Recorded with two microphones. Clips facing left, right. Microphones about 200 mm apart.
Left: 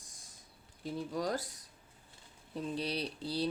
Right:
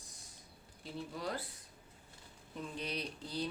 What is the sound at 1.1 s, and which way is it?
Speech, 40° left (ahead or behind).